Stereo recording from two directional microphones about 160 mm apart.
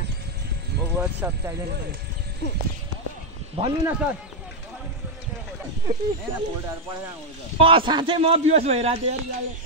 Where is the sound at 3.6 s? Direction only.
40° right (ahead or behind).